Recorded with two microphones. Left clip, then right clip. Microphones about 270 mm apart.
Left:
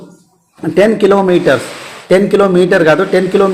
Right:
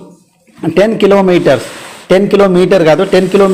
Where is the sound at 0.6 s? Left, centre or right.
Right.